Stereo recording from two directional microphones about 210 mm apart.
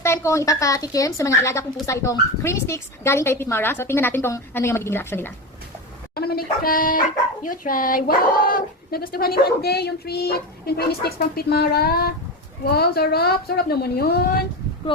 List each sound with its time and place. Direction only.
0.0 s a woman's voice: 15° left (ahead or behind)
6.1 s speech: 45° left (ahead or behind)